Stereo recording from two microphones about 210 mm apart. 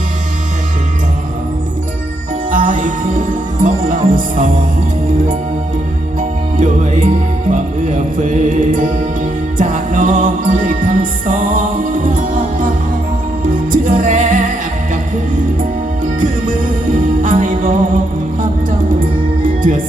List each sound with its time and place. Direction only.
2.5 s music: 40° right (ahead or behind)
6.1 s music: 40° right (ahead or behind)
13.8 s music: 40° right (ahead or behind)
16.2 s music: 40° right (ahead or behind)